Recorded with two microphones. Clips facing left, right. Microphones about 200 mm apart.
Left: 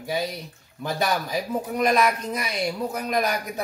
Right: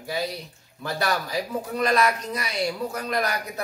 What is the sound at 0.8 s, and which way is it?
Speech, 20° left (ahead or behind).